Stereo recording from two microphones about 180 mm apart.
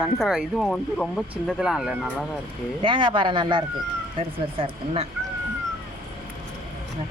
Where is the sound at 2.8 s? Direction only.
25° right (ahead or behind).